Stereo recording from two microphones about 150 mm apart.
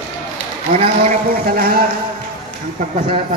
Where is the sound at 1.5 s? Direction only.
75° right (ahead or behind).